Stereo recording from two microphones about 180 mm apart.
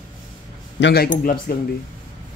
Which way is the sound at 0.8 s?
60° left (ahead or behind).